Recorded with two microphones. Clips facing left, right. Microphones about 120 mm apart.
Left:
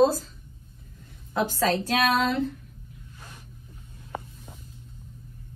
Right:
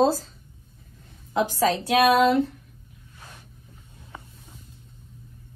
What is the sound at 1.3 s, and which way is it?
Speech, 15° right (ahead or behind).